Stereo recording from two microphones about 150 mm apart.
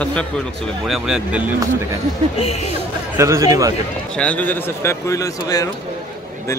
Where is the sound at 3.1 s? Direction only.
20° right (ahead or behind).